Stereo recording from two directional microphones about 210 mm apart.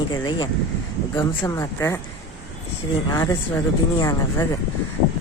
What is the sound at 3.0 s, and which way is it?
Speech, 15° left (ahead or behind).